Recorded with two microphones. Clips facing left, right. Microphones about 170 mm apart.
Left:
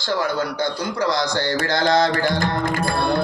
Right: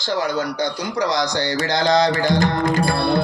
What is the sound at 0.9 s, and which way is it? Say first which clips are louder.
Speech: right 1 dB; 15° right (ahead or behind).